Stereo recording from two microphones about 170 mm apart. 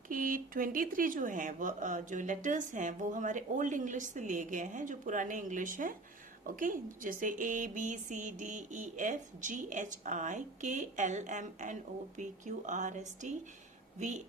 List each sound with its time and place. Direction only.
0.1 s a woman's voice: 55° right (ahead or behind)